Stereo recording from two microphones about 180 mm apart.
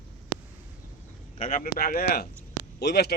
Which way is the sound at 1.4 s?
50° left (ahead or behind).